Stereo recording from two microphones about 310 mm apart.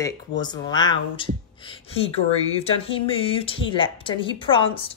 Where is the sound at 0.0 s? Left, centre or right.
Centre.